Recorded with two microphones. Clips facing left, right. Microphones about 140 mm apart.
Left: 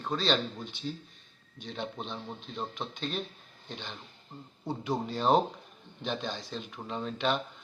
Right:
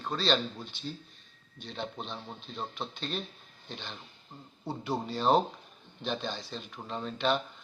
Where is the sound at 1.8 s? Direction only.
15° left (ahead or behind).